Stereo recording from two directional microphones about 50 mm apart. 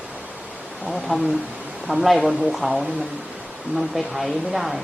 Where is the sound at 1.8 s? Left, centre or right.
Centre.